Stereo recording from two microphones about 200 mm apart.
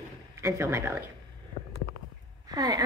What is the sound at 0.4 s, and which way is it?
Speech, 15° right (ahead or behind).